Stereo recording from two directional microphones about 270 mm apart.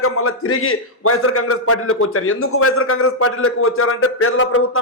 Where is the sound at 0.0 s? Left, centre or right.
Left.